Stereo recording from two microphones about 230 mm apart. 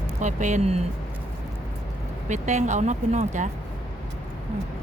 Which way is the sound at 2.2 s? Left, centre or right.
Right.